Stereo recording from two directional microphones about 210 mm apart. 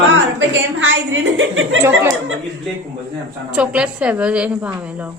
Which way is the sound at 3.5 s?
5° right (ahead or behind).